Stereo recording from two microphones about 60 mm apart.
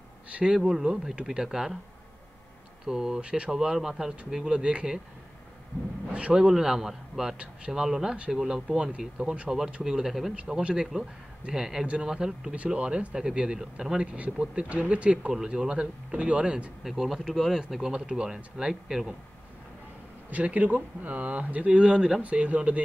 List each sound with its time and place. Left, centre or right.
0.3 s a sound: centre
0.6 s speech: centre
2.9 s speech: centre
6.1 s speech: centre
10.3 s speech: centre
16.8 s speech: centre
20.2 s speech: right